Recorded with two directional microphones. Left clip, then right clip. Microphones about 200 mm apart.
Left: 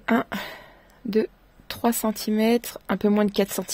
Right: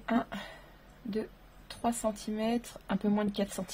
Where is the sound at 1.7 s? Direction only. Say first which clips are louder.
Left 8 dB; 55° left (ahead or behind).